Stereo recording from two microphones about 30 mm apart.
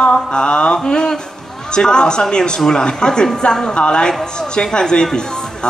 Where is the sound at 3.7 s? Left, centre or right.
Left.